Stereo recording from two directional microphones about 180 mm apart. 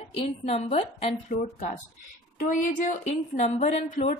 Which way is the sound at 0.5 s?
40° left (ahead or behind).